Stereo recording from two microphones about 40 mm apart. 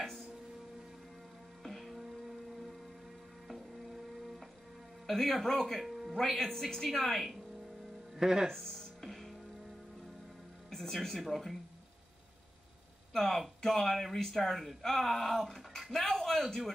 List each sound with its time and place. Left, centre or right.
1.6 s music: centre
3.4 s printer: centre
5.0 s speech: centre
5.8 s music: centre
6.2 s speech: centre
6.5 s speech: centre
8.2 s speech: centre
8.5 s music: centre
10.7 s speech: centre
13.1 s speech: centre